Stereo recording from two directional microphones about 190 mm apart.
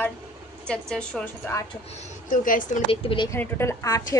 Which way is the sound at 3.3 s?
15° left (ahead or behind).